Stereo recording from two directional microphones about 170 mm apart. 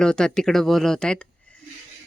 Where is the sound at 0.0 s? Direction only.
5° left (ahead or behind).